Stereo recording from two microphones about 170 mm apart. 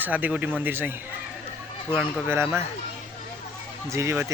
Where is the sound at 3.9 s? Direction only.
15° right (ahead or behind).